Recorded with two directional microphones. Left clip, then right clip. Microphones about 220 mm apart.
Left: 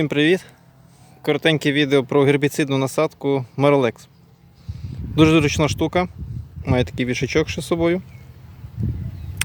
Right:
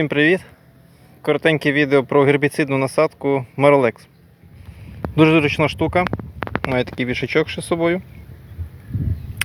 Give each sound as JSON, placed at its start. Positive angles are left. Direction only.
{"t": 0.0, "sound": "speech", "side_deg": 15}
{"t": 5.1, "sound": "speech", "side_deg": 15}